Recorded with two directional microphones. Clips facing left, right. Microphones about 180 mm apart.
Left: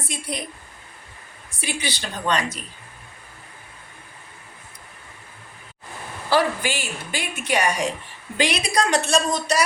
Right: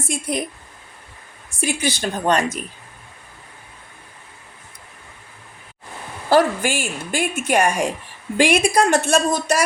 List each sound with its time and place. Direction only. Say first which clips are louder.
0.0 s a woman's voice: right 6 dB; 50° right (ahead or behind)
1.5 s a woman's voice: right 6 dB; 45° right (ahead or behind)
6.3 s a woman's voice: right 5 dB; 50° right (ahead or behind)